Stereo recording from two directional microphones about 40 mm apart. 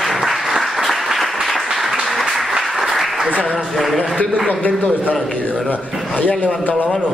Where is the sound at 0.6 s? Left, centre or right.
Centre.